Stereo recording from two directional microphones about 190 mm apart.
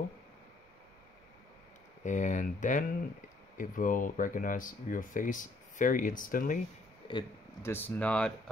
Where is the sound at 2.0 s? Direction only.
40° left (ahead or behind).